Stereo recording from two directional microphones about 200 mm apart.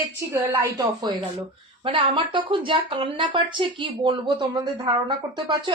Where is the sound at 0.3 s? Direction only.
10° right (ahead or behind).